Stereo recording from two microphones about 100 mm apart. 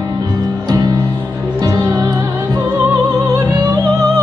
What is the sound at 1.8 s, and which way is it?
Music, 35° right (ahead or behind).